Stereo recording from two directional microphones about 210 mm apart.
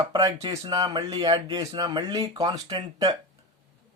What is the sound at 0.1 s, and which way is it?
Speech, 15° right (ahead or behind).